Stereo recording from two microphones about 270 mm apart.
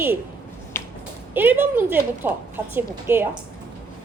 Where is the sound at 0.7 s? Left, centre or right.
Centre.